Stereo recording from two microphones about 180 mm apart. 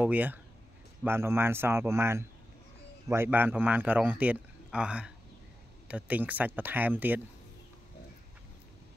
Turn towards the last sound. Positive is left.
turn(degrees=-10)  # may be behind; listen again after turning